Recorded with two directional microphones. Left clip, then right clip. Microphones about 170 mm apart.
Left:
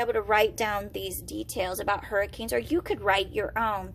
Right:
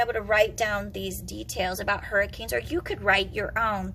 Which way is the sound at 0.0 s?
40° left (ahead or behind).